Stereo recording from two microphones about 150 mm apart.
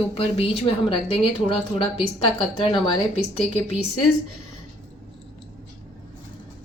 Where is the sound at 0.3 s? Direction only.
40° left (ahead or behind).